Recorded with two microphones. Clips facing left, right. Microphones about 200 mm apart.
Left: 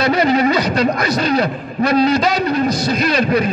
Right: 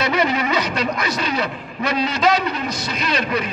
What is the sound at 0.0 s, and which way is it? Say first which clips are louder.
Speech: left 6 dB; 35° left (ahead or behind).